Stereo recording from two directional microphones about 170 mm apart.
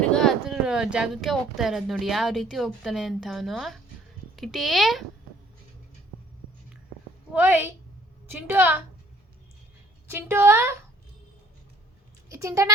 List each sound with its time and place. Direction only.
0.0 s speech: 5° left (ahead or behind)
7.3 s a woman's voice: 10° right (ahead or behind)
10.1 s a woman's voice: 15° right (ahead or behind)
12.3 s speech: 15° right (ahead or behind)